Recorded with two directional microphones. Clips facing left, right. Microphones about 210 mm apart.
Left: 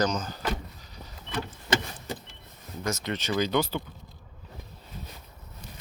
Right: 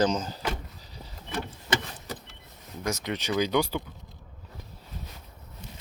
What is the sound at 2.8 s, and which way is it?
Speech, 15° right (ahead or behind).